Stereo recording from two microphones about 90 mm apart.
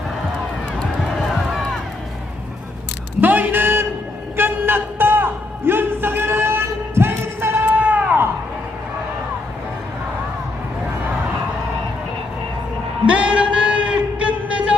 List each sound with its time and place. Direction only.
1.3 s run: 5° left (ahead or behind)
3.2 s a sound: 20° right (ahead or behind)
13.1 s music: 15° right (ahead or behind)